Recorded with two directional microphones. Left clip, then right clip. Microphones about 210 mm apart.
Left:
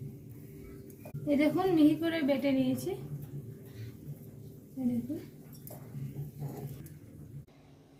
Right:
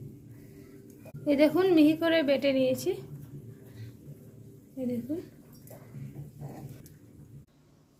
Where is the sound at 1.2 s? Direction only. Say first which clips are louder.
Right 5 dB; 60° right (ahead or behind).